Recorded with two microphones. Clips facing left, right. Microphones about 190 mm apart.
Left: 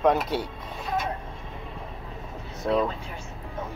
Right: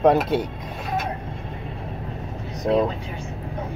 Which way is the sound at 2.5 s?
20° right (ahead or behind).